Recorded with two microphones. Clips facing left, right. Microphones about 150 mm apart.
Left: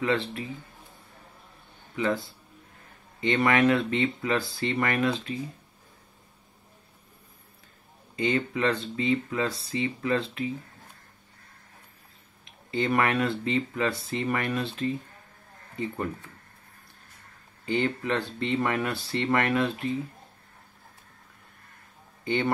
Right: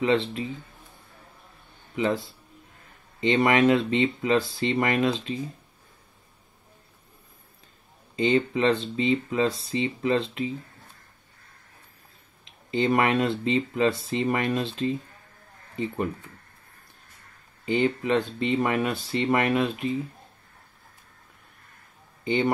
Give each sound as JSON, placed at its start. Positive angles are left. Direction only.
{"t": 0.0, "sound": "speech", "side_deg": -25}
{"t": 2.0, "sound": "speech", "side_deg": -20}
{"t": 8.2, "sound": "speech", "side_deg": -25}
{"t": 12.7, "sound": "speech", "side_deg": -20}
{"t": 17.6, "sound": "speech", "side_deg": -15}
{"t": 22.2, "sound": "speech", "side_deg": -15}